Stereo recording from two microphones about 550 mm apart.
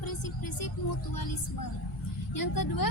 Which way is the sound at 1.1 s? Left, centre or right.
Left.